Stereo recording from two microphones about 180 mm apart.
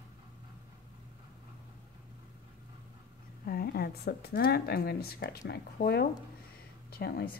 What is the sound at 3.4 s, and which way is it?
Speech, 55° left (ahead or behind).